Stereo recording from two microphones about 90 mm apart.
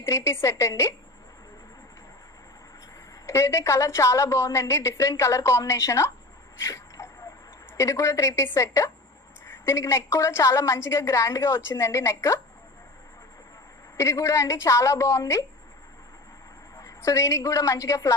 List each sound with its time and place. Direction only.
0.0 s a woman's voice: 30° left (ahead or behind)
3.2 s a woman's voice: 35° left (ahead or behind)
6.6 s a sound: 35° left (ahead or behind)
7.8 s a woman's voice: 35° left (ahead or behind)
13.9 s a woman's voice: 35° left (ahead or behind)
16.7 s a woman's voice: 40° left (ahead or behind)